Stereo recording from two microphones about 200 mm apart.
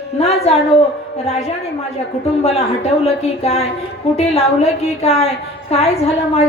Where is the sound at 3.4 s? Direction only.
30° left (ahead or behind).